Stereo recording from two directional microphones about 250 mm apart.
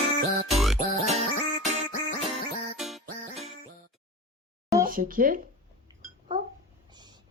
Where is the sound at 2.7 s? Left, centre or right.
Centre.